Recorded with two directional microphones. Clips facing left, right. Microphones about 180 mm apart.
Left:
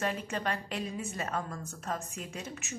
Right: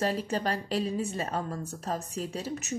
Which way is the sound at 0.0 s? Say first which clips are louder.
Right 4 dB; 35° right (ahead or behind).